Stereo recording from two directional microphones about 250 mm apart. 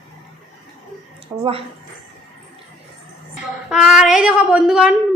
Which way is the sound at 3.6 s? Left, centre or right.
Centre.